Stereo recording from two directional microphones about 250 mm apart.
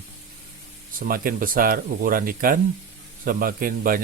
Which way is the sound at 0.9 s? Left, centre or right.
Right.